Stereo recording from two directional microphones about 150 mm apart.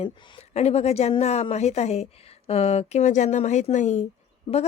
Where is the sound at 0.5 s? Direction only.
45° left (ahead or behind).